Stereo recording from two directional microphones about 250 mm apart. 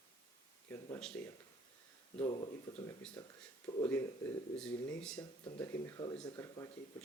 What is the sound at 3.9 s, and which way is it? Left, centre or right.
Speech, centre.